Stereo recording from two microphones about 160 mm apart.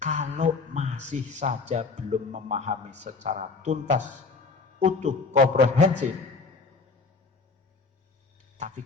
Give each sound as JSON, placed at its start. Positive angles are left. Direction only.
{"t": 0.0, "sound": "speech", "side_deg": -45}
{"t": 8.5, "sound": "speech", "side_deg": -50}